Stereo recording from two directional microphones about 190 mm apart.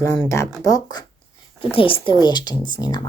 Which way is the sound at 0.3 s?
15° left (ahead or behind).